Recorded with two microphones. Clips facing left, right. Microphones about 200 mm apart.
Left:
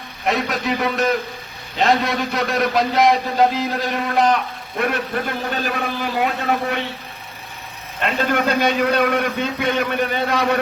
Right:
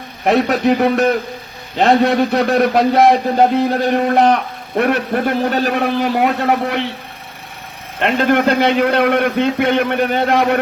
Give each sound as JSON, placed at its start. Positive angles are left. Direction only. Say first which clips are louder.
{"t": 0.3, "sound": "a man's voice", "louder": "right 11 dB", "side_deg": -60}
{"t": 8.0, "sound": "a man's voice", "louder": "right 6 dB", "side_deg": -55}